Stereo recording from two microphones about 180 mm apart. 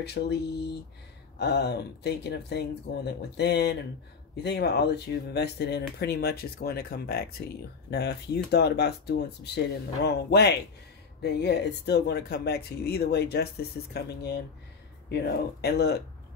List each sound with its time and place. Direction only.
0.0 s speech: 65° left (ahead or behind)